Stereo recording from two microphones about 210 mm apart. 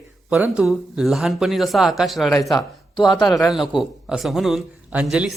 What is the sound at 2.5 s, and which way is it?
Speech, 20° left (ahead or behind).